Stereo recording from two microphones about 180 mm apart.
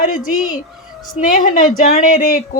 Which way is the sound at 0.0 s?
50° left (ahead or behind).